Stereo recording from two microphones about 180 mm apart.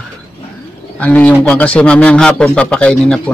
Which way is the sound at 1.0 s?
10° left (ahead or behind).